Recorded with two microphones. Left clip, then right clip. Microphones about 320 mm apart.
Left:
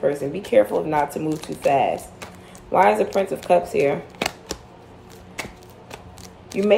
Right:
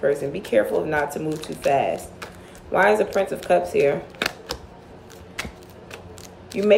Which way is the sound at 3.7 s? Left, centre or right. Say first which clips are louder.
Right 1 dB; centre.